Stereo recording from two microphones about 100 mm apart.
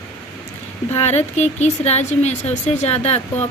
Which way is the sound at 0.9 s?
90° left.